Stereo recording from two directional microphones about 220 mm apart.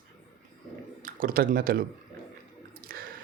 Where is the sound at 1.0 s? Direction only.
40° right (ahead or behind).